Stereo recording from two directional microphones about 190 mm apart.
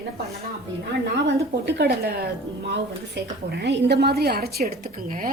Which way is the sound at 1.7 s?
60° right (ahead or behind).